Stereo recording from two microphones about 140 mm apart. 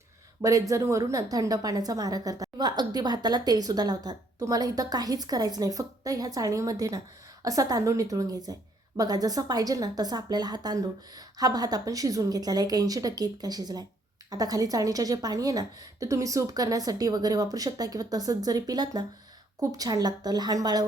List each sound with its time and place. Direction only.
0.4 s a woman's voice: 25° right (ahead or behind)